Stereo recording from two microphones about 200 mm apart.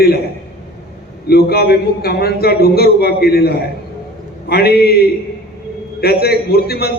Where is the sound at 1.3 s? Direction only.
50° left (ahead or behind).